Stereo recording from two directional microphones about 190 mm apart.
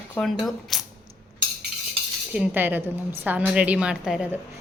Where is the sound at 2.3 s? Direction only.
10° right (ahead or behind).